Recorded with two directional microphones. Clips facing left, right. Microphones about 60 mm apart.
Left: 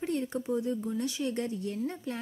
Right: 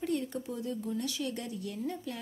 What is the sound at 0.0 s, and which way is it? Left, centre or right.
Speech, left.